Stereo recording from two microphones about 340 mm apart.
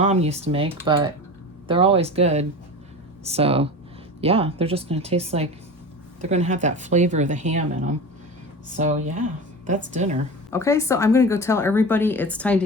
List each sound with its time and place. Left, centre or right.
0.0 s speech: centre
8.8 s speech: right
10.5 s a woman's voice: centre